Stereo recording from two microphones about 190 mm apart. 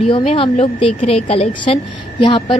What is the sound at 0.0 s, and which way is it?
A woman's voice, 30° left (ahead or behind).